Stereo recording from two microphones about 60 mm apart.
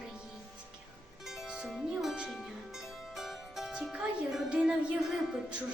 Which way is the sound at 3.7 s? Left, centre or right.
Centre.